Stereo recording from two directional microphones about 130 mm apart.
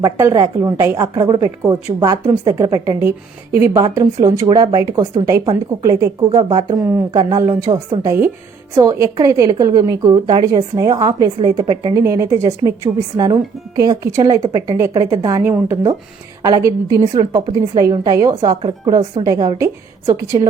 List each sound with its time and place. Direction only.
0.0 s a woman's voice: 25° right (ahead or behind)
11.9 s a woman's voice: 20° right (ahead or behind)